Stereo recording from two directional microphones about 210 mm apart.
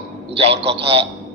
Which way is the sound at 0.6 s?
55° right (ahead or behind).